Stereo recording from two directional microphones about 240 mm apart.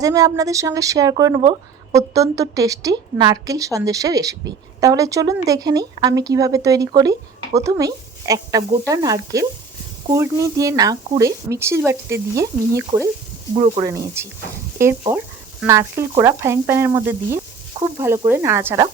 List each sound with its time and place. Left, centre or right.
0.0 s speech: centre
15.6 s speech: centre